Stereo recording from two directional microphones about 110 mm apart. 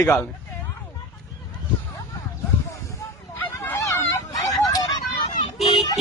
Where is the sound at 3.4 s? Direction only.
20° left (ahead or behind).